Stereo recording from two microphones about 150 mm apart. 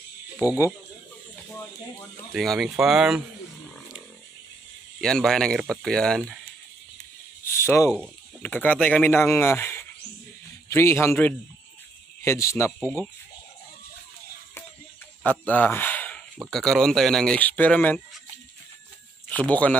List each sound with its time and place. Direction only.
2.3 s speech: centre (ahead or behind)
5.0 s speech: 5° left (ahead or behind)
7.4 s a sound: 15° left (ahead or behind)
8.0 s a man's voice: 10° left (ahead or behind)
15.2 s speech: 10° left (ahead or behind)
19.2 s speech: 10° left (ahead or behind)